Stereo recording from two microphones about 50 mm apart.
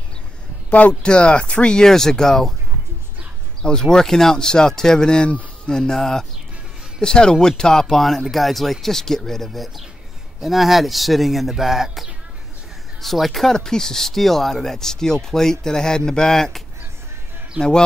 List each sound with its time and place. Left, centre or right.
0.7 s speech: left
1.0 s speech: left
3.6 s speech: centre